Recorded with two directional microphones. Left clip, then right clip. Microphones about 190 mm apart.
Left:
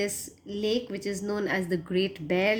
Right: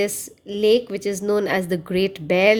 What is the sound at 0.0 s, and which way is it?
Speech, 55° right (ahead or behind).